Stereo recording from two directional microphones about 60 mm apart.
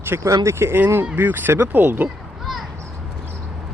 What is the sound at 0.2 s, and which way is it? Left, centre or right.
Speech, right.